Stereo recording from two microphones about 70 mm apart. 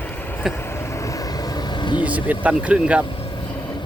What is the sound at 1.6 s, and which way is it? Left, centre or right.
Vehicle, left.